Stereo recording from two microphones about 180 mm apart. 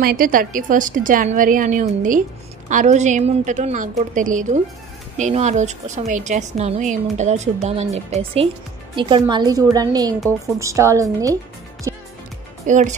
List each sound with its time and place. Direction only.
0.0 s a woman's voice: 55° right (ahead or behind); by 8.5 s 35° right (ahead or behind)
9.3 s a woman's voice: 20° right (ahead or behind)
11.9 s music: 20° right (ahead or behind)
12.6 s speech: 45° right (ahead or behind)